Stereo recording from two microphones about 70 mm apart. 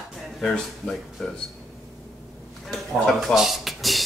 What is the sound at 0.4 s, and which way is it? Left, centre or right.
Speech, centre.